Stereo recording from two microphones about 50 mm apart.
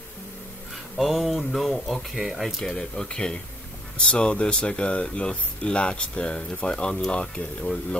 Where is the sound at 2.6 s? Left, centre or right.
Centre.